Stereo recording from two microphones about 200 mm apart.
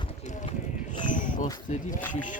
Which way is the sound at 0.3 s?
35° left (ahead or behind).